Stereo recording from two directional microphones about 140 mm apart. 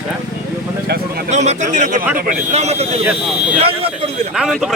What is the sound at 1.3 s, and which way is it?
A man's voice, 55° right (ahead or behind).